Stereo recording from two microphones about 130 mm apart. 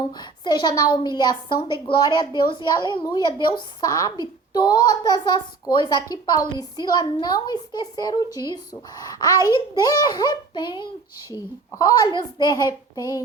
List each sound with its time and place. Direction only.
0.1 s a woman's voice: 35° left (ahead or behind)